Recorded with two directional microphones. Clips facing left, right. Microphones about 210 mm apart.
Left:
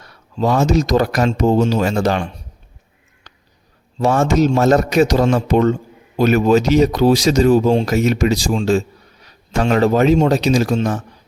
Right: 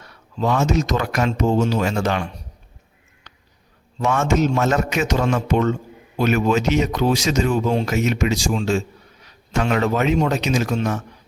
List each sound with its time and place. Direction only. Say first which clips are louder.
0.0 s speech: left 4 dB; 35° left (ahead or behind)
3.3 s a sound: left 2 dB; 35° left (ahead or behind)
4.0 s speech: left 4 dB; 35° left (ahead or behind)